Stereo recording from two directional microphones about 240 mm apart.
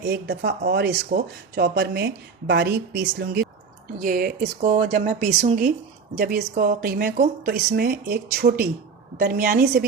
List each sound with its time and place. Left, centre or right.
0.1 s speech: right